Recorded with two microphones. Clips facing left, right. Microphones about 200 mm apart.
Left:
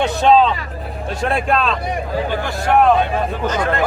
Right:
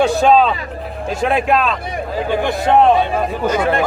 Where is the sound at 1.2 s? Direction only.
5° right (ahead or behind).